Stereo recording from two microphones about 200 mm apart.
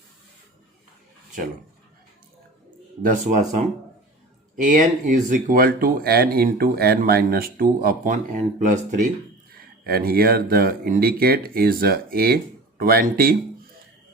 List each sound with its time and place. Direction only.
3.0 s speech: 40° right (ahead or behind)
9.6 s speech: 50° right (ahead or behind)